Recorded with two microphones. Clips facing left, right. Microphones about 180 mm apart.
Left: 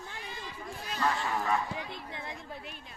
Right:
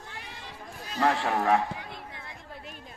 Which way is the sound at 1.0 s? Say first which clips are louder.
Right 6 dB; 75° right (ahead or behind).